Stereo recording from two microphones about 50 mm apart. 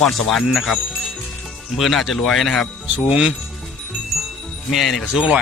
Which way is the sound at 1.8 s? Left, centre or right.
Centre.